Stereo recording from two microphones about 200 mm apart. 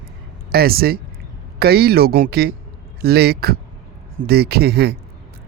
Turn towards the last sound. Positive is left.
turn(degrees=-50)  # may be behind; listen again after turning